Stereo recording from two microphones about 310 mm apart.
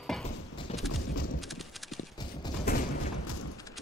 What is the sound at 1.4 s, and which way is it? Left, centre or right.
Clip-clop, centre.